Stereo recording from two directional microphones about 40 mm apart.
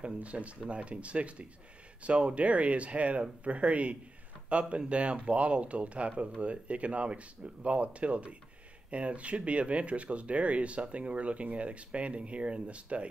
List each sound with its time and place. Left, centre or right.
0.0 s speech: right